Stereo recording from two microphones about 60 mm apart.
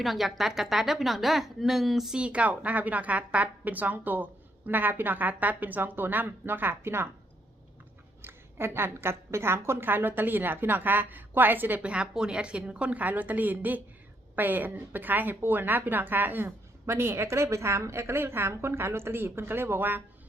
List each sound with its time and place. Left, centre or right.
0.0 s a woman's voice: centre
2.1 s a woman's voice: centre; by 7.1 s right
8.2 s a woman's voice: right
11.8 s a woman's voice: centre; by 16.5 s right
16.8 s a woman's voice: right